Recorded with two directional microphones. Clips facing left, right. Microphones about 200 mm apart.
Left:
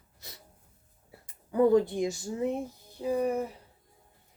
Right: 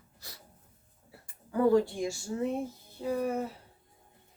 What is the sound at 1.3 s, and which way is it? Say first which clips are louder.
Speech: left 2 dB; 20° left (ahead or behind).